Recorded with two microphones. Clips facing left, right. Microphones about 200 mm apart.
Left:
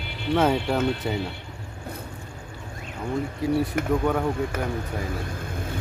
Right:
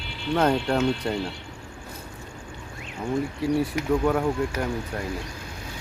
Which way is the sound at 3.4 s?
Centre (ahead or behind).